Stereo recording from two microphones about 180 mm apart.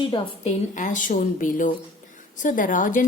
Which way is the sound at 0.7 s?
45° left (ahead or behind).